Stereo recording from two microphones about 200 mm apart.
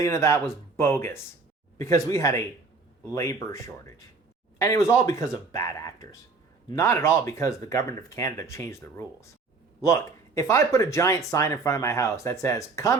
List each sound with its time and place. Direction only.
0.0 s speech: 15° left (ahead or behind)